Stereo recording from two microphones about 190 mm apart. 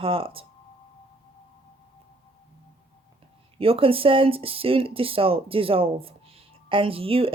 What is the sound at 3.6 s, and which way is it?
Speech, 30° right (ahead or behind).